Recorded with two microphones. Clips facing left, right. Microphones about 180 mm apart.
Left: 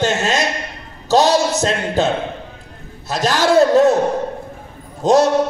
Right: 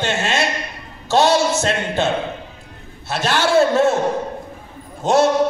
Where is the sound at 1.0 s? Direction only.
40° left (ahead or behind).